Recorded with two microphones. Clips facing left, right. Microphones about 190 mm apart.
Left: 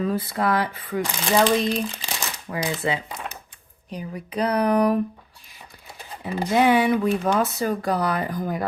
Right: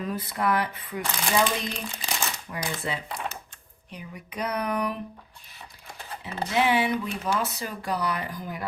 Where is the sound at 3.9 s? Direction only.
35° left (ahead or behind).